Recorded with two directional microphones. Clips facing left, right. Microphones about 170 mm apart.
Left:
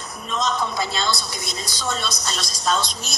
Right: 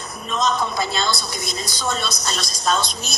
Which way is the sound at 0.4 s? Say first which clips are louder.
Right 2 dB; 50° right (ahead or behind).